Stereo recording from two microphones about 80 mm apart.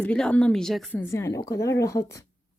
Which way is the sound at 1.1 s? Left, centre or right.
Left.